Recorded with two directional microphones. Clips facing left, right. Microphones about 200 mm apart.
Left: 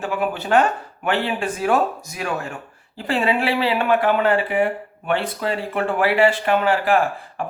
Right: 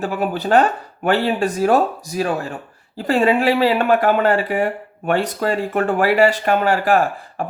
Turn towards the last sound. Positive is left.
turn(degrees=-40)  # may be behind; listen again after turning